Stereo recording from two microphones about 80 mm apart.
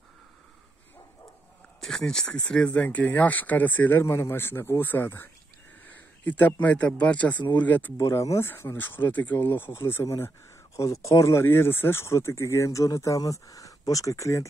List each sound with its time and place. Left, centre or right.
1.8 s speech: centre; by 7.9 s left
8.0 s speech: left